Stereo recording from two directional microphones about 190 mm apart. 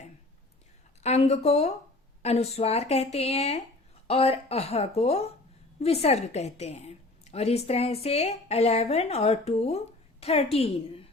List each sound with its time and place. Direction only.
1.0 s a woman's voice: 35° left (ahead or behind)